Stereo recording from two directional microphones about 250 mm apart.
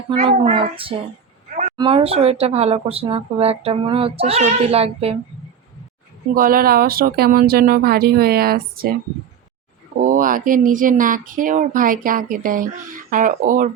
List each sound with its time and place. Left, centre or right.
0.1 s speech: right
6.3 s speech: right
10.0 s speech: right